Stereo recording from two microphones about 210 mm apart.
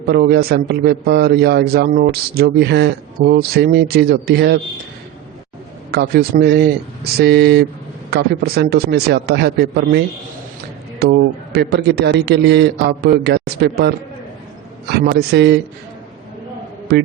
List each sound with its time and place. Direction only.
0.0 s a man's voice: 50° right (ahead or behind)
6.4 s a man's voice: 50° right (ahead or behind)
11.0 s a man's voice: 50° right (ahead or behind)
16.9 s a man's voice: 50° right (ahead or behind)